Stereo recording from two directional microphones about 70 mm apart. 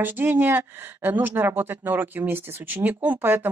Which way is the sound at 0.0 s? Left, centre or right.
Right.